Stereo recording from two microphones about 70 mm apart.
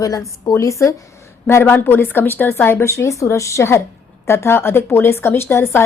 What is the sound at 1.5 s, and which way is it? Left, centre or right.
A woman's voice, left.